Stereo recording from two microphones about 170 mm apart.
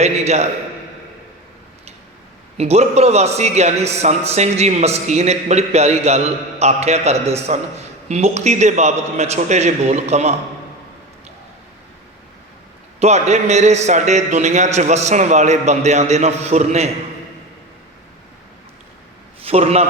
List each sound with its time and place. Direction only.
0.0 s a man's voice: 40° right (ahead or behind)
2.6 s a man's voice: 40° right (ahead or behind)
13.0 s a man's voice: 40° right (ahead or behind)
19.5 s a man's voice: 40° right (ahead or behind)